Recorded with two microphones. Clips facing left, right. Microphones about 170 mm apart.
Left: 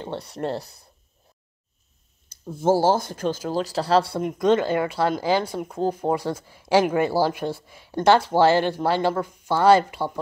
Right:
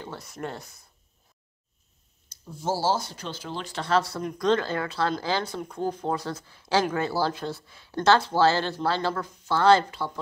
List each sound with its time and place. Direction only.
0.0 s speech: 30° left (ahead or behind)
2.2 s speech: 55° left (ahead or behind); by 10.1 s 15° left (ahead or behind)